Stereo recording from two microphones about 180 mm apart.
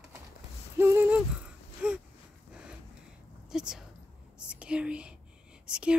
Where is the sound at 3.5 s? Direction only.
5° right (ahead or behind).